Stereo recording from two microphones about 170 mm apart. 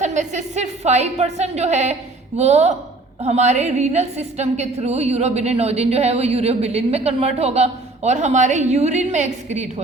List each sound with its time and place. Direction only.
0.0 s a woman's voice: 45° right (ahead or behind)